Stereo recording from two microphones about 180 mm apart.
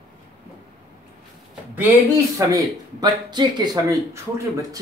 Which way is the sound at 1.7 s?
15° right (ahead or behind).